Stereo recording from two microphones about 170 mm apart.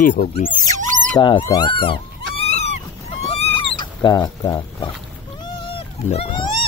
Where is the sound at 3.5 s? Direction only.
25° left (ahead or behind).